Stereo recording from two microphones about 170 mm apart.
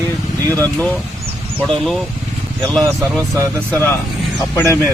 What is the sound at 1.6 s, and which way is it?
Speech, centre (ahead or behind).